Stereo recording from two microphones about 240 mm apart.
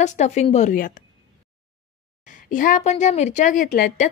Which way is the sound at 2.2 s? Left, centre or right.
Left.